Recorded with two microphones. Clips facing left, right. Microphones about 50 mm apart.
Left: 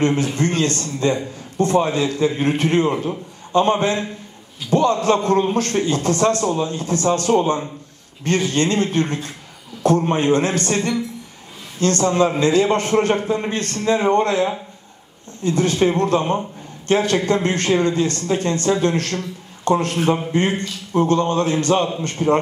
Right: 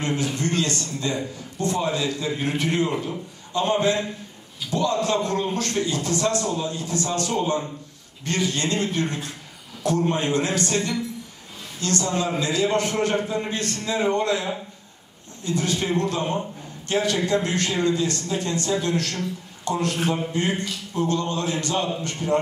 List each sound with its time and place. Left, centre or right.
0.0 s a man's voice: left